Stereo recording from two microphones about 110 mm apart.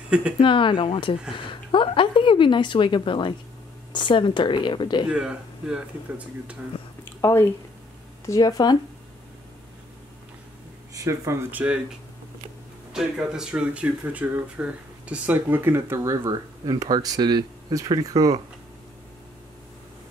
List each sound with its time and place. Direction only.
0.4 s a woman's voice: 50° left (ahead or behind)
5.0 s speech: 10° right (ahead or behind)
6.7 s a sound: 55° left (ahead or behind)
7.2 s speech: 20° left (ahead or behind)
8.3 s speech: 35° left (ahead or behind)
11.0 s speech: 25° right (ahead or behind)
12.9 s speech: 5° right (ahead or behind); by 18.4 s 35° right (ahead or behind)